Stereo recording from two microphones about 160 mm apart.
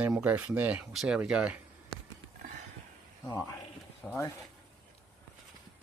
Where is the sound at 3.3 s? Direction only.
20° left (ahead or behind).